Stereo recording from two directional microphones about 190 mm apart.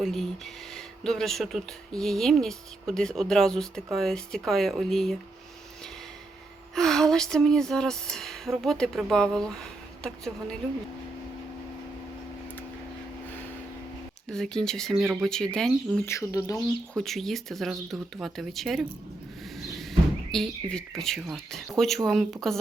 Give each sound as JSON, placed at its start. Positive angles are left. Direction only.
{"t": 0.0, "sound": "speech", "side_deg": 0}
{"t": 6.7, "sound": "speech", "side_deg": 0}
{"t": 14.3, "sound": "speech", "side_deg": 0}
{"t": 16.0, "sound": "speech", "side_deg": 15}
{"t": 17.0, "sound": "speech", "side_deg": 0}